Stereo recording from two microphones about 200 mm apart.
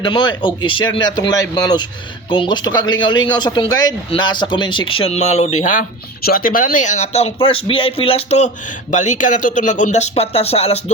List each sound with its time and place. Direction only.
0.0 s speech: 25° left (ahead or behind)